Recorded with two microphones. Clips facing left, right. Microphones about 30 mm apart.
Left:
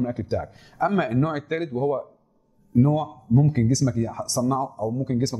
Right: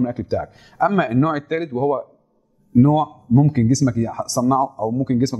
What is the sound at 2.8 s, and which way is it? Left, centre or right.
Speech, right.